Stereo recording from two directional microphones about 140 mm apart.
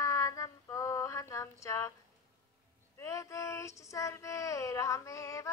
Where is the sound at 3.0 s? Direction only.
20° left (ahead or behind).